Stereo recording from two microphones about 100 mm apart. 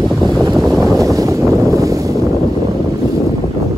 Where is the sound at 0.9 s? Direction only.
35° right (ahead or behind).